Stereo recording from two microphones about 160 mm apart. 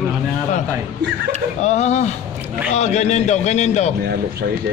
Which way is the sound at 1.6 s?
45° left (ahead or behind).